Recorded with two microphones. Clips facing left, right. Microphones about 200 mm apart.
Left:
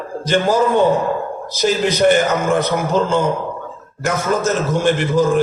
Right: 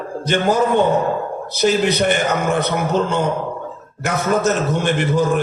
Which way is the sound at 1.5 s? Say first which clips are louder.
Right 1 dB; 60° right (ahead or behind).